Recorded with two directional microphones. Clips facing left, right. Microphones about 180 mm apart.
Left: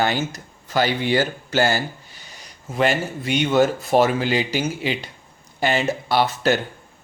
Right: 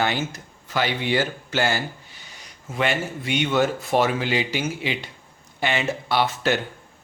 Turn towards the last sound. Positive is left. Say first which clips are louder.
# left 3 dB
turn(degrees=40)  # may be behind; listen again after turning